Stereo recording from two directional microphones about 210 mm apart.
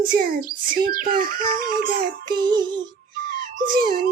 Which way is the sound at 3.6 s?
45° right (ahead or behind).